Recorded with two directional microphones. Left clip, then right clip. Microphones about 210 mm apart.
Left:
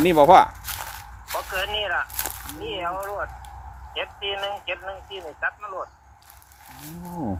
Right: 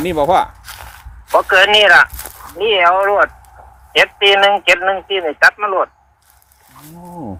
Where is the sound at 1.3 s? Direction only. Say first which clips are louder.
Right 17 dB; 45° right (ahead or behind).